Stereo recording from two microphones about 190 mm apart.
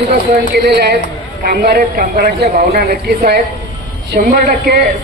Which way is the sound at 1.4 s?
55° right (ahead or behind).